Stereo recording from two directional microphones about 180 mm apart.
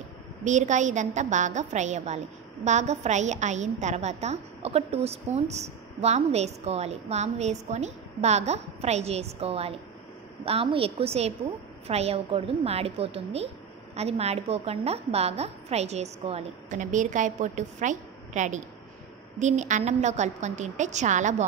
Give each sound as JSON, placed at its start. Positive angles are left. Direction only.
{"t": 0.4, "sound": "a woman's voice", "side_deg": -40}